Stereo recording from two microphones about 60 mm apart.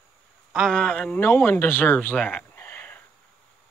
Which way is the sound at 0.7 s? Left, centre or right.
Centre.